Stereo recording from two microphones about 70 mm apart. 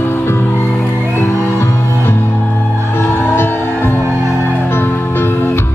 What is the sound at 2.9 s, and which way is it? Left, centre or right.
Music, left.